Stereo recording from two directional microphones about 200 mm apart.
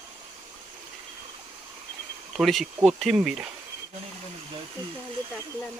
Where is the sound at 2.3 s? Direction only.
Centre (ahead or behind).